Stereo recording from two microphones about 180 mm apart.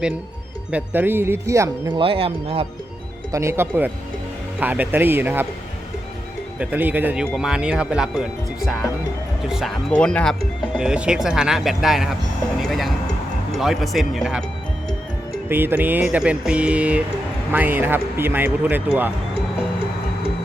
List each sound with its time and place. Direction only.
0.7 s speech: 10° right (ahead or behind)
2.0 s speech: 30° right (ahead or behind)
3.3 s speech: 15° right (ahead or behind)
6.6 s speech: 10° right (ahead or behind)
10.8 s speech: 5° right (ahead or behind)
15.4 s speech: 10° right (ahead or behind)